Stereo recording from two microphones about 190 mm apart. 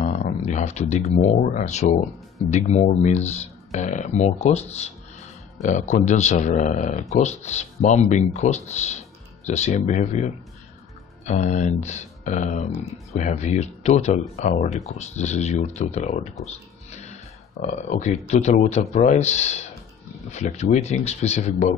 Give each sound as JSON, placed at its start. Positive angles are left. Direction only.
{"t": 0.0, "sound": "a man's voice", "side_deg": 40}
{"t": 16.9, "sound": "music", "side_deg": 35}
{"t": 18.2, "sound": "a man's voice", "side_deg": 35}